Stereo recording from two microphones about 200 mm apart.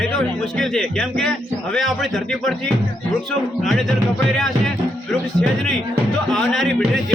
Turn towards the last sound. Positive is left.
turn(degrees=0)  # may be behind; listen again after turning